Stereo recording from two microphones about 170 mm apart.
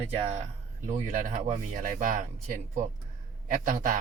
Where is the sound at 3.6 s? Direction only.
50° right (ahead or behind).